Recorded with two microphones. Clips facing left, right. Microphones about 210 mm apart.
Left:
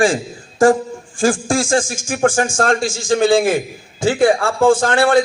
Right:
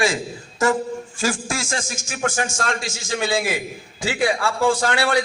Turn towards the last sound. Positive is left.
turn(degrees=50)  # may be behind; listen again after turning